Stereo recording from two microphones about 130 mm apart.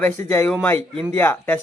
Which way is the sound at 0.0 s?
15° left (ahead or behind).